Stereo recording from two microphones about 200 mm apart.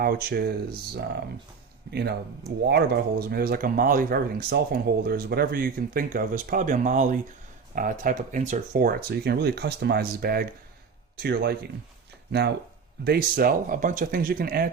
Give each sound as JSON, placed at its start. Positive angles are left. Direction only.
{"t": 0.0, "sound": "speech", "side_deg": -50}
{"t": 1.9, "sound": "speech", "side_deg": -55}